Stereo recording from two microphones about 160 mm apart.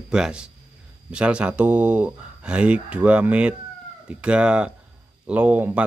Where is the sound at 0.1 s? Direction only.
5° right (ahead or behind).